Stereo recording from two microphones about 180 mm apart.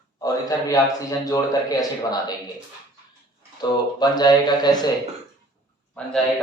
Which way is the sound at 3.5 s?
25° left (ahead or behind).